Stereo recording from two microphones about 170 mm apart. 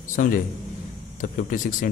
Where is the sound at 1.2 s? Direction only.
50° left (ahead or behind).